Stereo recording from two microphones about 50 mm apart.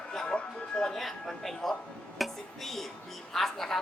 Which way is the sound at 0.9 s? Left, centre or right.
Centre.